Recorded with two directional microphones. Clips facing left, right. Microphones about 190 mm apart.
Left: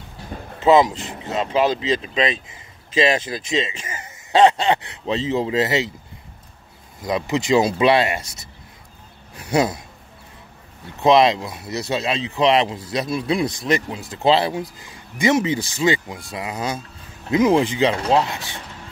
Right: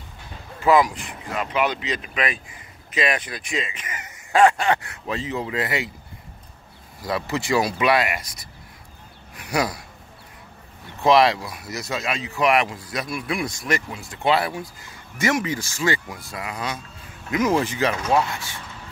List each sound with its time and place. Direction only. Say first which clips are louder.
0.6 s speech: left 3 dB; 25° left (ahead or behind)
7.0 s a man's voice: left 4 dB; 20° left (ahead or behind)
11.0 s speech: left 2 dB; 20° left (ahead or behind)
17.9 s speech: left 3 dB; 30° left (ahead or behind)